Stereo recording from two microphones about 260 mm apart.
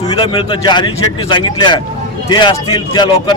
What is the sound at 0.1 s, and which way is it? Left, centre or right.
Speech, centre.